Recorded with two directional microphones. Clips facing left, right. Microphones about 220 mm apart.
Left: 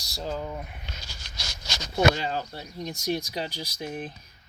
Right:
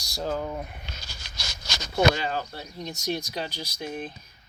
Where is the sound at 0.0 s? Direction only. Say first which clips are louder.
Right 3 dB; 10° right (ahead or behind).